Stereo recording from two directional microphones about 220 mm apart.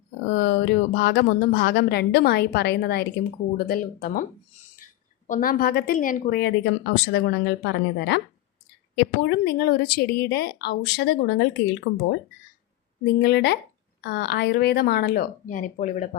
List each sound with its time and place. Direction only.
0.3 s a woman's voice: 50° left (ahead or behind)
5.3 s a woman's voice: 40° left (ahead or behind)
13.2 s a woman's voice: 50° left (ahead or behind)